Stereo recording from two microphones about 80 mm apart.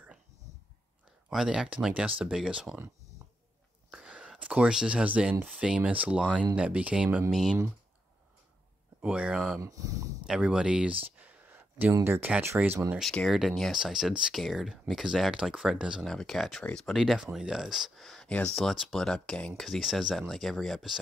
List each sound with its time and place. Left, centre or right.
1.3 s speech: centre
3.9 s whispering: centre
4.3 s speech: centre
7.2 s speech: centre
9.0 s speech: centre
9.6 s speech: right
10.4 s speech: centre
13.2 s speech: centre
16.1 s speech: centre
18.0 s a sound: centre
18.3 s speech: centre